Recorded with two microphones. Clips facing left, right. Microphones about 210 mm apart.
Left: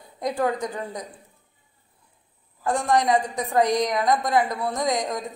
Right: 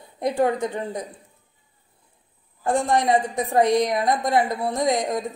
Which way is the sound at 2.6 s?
25° right (ahead or behind).